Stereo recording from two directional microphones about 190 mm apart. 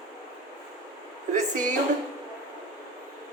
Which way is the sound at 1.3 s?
45° right (ahead or behind).